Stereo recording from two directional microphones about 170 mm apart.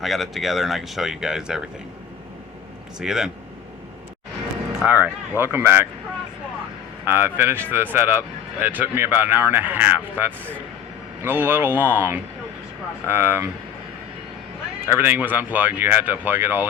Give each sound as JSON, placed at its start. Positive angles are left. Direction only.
{"t": 0.0, "sound": "speech", "side_deg": 0}
{"t": 3.0, "sound": "speech", "side_deg": -5}
{"t": 4.8, "sound": "speech", "side_deg": -10}
{"t": 7.0, "sound": "speech", "side_deg": -15}
{"t": 14.8, "sound": "speech", "side_deg": -10}